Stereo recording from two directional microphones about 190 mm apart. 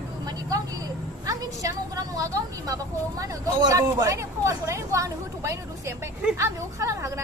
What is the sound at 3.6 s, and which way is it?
Speech, 20° right (ahead or behind).